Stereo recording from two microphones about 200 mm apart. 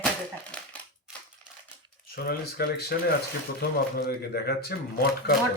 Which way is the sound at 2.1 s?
50° left (ahead or behind).